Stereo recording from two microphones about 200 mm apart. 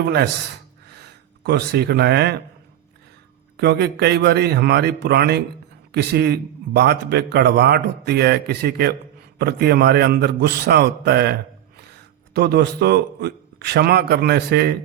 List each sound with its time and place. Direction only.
0.0 s a man's voice: 55° right (ahead or behind)
0.9 s a sound: 55° right (ahead or behind)
3.6 s a man's voice: 55° right (ahead or behind)